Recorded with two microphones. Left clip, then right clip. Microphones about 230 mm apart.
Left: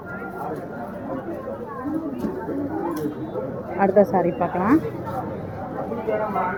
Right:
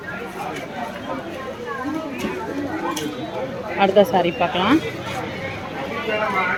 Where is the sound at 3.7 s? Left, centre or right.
Centre.